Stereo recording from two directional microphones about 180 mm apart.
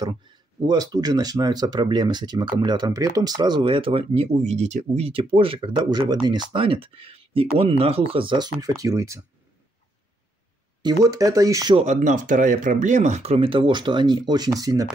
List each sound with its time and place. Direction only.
0.0 s speech: 20° right (ahead or behind)
10.8 s speech: 20° right (ahead or behind)
11.7 s speech: 40° right (ahead or behind); by 14.9 s 20° right (ahead or behind)